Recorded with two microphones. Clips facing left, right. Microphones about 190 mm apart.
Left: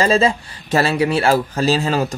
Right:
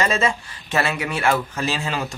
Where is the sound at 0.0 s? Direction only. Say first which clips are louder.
Left 6 dB; 30° left (ahead or behind).